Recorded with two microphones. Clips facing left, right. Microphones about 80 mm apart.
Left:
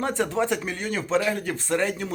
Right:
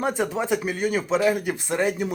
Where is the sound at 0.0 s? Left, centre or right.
Centre.